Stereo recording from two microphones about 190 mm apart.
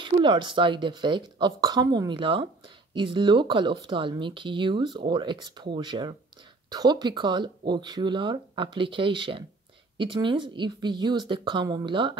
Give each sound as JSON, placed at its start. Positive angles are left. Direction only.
{"t": 0.0, "sound": "speech", "side_deg": -25}